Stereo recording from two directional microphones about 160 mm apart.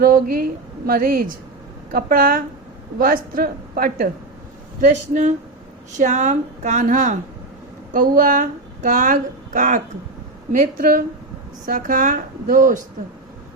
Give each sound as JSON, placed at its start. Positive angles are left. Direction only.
{"t": 0.0, "sound": "a woman's voice", "side_deg": -60}
{"t": 4.8, "sound": "speech", "side_deg": -50}
{"t": 8.2, "sound": "a woman's voice", "side_deg": -55}